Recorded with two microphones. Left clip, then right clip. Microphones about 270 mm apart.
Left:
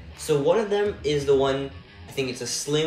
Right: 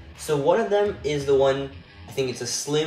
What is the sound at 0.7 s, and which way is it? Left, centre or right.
Speech, right.